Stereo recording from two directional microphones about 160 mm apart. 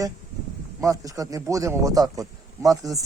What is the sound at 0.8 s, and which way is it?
A man's voice, 20° right (ahead or behind).